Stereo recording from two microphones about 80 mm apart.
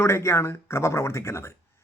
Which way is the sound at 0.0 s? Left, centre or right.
Left.